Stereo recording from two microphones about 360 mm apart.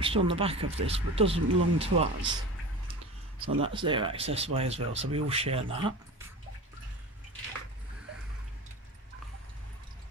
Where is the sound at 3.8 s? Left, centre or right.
Centre.